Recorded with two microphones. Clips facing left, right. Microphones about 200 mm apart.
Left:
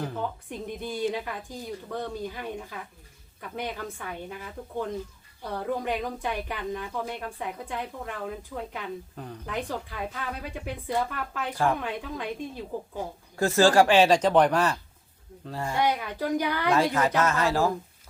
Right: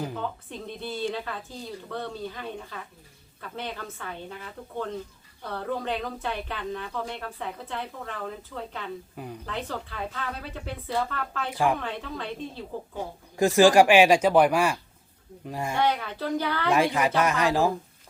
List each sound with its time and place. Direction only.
0.2 s speech: 15° left (ahead or behind)
9.1 s speech: 10° right (ahead or behind)
9.5 s speech: 15° left (ahead or behind)
11.5 s speech: 10° right (ahead or behind)
11.8 s speech: 10° left (ahead or behind)
13.3 s speech: 15° right (ahead or behind)
15.8 s speech: 10° left (ahead or behind)
16.6 s speech: 15° right (ahead or behind)